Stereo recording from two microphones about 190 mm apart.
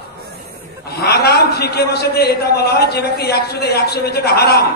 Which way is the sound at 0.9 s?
55° left (ahead or behind).